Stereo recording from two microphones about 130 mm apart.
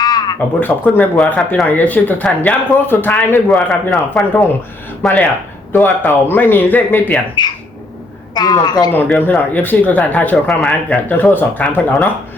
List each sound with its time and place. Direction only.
0.0 s frog: 30° left (ahead or behind)
0.6 s speech: 15° left (ahead or behind)
4.1 s speech: 5° left (ahead or behind)
5.7 s speech: 15° left (ahead or behind)
7.4 s a woman's voice: 35° left (ahead or behind)
8.9 s speech: 15° left (ahead or behind)